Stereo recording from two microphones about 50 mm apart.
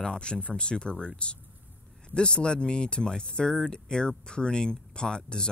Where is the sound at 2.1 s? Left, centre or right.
Centre.